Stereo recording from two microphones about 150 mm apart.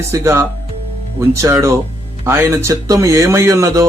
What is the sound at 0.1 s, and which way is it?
Speech, 15° right (ahead or behind).